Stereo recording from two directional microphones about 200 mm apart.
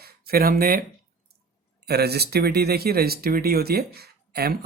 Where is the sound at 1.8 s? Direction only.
55° right (ahead or behind).